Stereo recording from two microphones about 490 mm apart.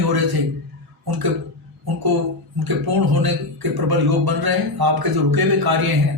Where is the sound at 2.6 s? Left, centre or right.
Right.